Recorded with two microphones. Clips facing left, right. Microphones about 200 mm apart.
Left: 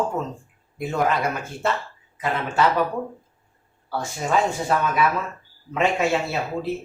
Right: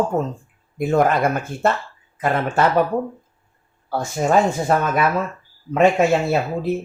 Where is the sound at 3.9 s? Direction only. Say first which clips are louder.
Right 5 dB; 50° right (ahead or behind).